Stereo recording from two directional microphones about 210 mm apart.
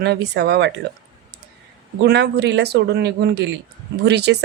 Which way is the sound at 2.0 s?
50° right (ahead or behind).